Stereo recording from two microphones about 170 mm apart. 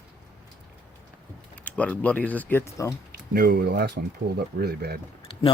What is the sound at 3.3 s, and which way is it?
Speech, 65° right (ahead or behind).